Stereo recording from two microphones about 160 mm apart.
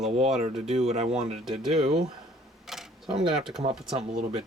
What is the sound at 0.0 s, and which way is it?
Speech, 5° right (ahead or behind).